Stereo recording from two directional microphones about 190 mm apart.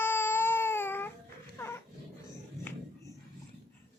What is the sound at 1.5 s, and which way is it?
Dog, 10° left (ahead or behind).